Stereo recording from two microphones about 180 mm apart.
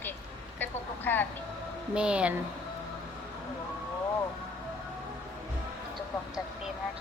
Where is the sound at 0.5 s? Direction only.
10° left (ahead or behind).